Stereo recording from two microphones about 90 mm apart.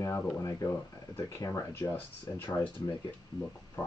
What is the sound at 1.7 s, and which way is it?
Speech, 25° left (ahead or behind).